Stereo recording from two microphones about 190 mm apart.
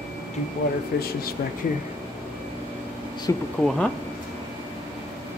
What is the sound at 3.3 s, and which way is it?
Speech, 15° left (ahead or behind).